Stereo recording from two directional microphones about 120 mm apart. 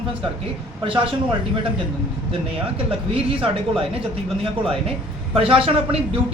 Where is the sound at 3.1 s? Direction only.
50° right (ahead or behind).